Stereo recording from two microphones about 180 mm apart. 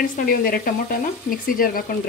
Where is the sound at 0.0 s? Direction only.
55° left (ahead or behind).